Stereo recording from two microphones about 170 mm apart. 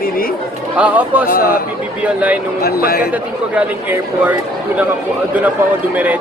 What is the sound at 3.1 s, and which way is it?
Speech, 10° right (ahead or behind).